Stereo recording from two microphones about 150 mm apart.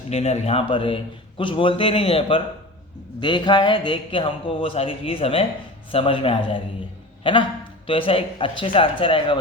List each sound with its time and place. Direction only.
0.1 s a man's voice: 45° left (ahead or behind)